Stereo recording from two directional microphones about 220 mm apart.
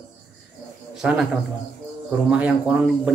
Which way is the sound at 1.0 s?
5° right (ahead or behind).